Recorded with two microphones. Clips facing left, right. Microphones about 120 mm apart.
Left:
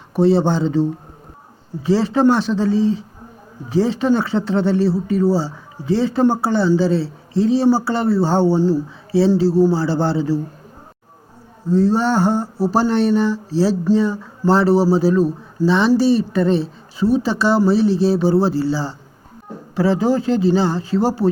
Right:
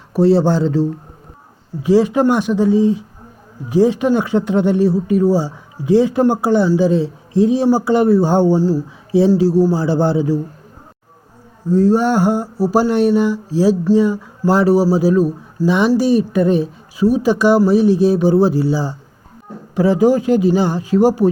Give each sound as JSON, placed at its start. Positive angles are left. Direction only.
{"t": 0.1, "sound": "speech", "side_deg": -5}
{"t": 11.7, "sound": "speech", "side_deg": -15}